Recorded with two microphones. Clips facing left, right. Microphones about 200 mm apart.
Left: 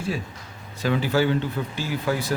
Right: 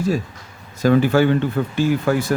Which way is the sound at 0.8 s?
50° right (ahead or behind).